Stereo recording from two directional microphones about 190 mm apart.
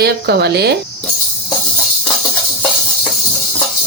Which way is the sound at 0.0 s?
60° right (ahead or behind).